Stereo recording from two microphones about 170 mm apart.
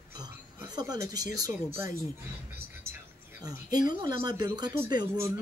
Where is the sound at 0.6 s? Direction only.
25° right (ahead or behind).